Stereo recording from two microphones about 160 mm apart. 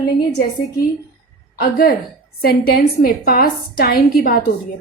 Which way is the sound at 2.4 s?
75° left (ahead or behind).